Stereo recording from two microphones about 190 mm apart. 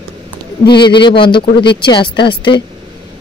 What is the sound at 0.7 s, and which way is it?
Speech, 25° left (ahead or behind).